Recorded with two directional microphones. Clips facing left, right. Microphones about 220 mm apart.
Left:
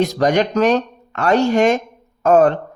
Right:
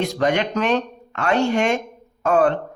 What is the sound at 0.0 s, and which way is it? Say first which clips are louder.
Speech: left 4 dB; 40° left (ahead or behind).